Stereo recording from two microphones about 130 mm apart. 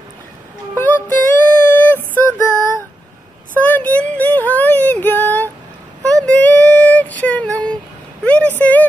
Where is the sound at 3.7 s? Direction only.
10° left (ahead or behind).